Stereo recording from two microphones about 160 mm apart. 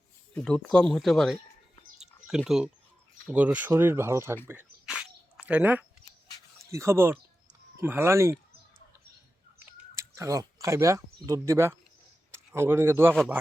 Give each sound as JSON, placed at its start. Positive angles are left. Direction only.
{"t": 0.3, "sound": "speech", "side_deg": 5}
{"t": 4.9, "sound": "a sound", "side_deg": -5}
{"t": 6.7, "sound": "speech", "side_deg": -15}
{"t": 9.9, "sound": "speech", "side_deg": -20}